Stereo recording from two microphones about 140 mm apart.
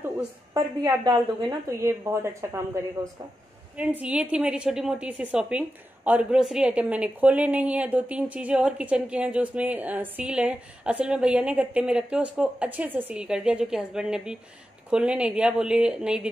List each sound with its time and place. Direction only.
1.0 s a woman's voice: 25° right (ahead or behind)
3.7 s a woman's voice: 10° right (ahead or behind)